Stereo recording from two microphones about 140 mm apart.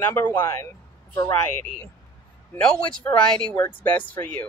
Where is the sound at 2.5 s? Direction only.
5° left (ahead or behind).